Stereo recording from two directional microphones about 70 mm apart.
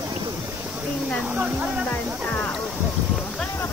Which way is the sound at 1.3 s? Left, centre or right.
Centre.